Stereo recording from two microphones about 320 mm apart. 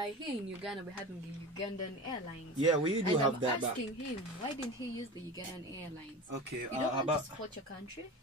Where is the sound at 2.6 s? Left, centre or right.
Centre.